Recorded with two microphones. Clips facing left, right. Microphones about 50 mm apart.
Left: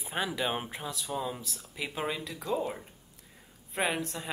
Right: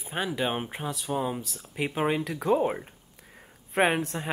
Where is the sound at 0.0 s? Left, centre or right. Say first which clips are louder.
Right 3 dB; centre.